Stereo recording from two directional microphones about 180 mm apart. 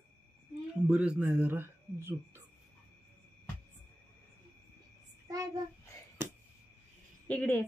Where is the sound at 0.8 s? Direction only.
5° right (ahead or behind).